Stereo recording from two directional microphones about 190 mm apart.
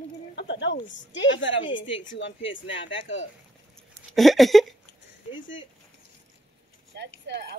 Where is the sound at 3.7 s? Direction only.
Centre (ahead or behind).